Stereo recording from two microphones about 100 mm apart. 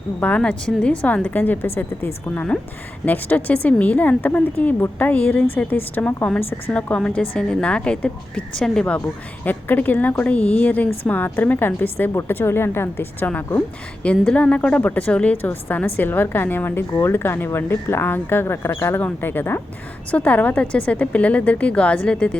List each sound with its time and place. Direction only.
0.2 s a woman's voice: 15° left (ahead or behind)